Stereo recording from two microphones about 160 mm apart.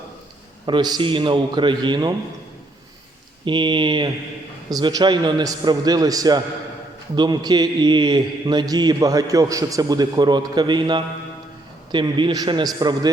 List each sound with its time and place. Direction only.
0.6 s a man's voice: 25° right (ahead or behind)
3.4 s a man's voice: 30° right (ahead or behind)